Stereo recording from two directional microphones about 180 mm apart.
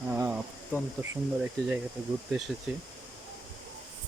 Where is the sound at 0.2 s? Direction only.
10° right (ahead or behind).